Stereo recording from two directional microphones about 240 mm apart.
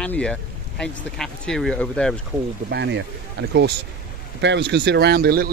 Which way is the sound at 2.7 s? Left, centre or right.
Right.